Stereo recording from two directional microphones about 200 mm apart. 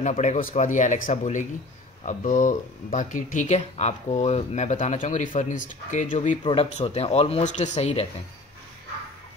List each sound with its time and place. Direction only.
0.0 s speech: 35° left (ahead or behind)